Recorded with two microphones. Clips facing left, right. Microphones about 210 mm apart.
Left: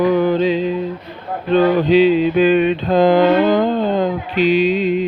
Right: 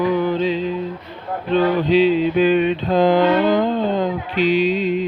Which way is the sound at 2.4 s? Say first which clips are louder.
Left 2 dB; 60° left (ahead or behind).